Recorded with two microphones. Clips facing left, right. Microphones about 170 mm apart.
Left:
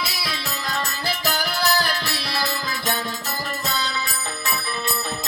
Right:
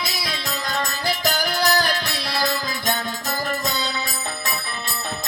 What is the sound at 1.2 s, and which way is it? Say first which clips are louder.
Music: right 2 dB; 15° right (ahead or behind).